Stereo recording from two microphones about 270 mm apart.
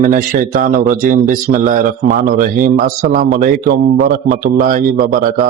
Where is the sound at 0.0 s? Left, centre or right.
Right.